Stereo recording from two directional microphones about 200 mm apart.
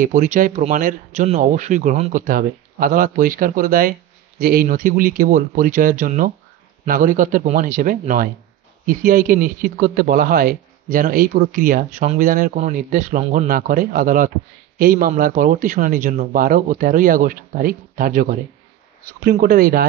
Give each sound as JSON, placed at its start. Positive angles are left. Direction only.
{"t": 0.0, "sound": "speech", "side_deg": -40}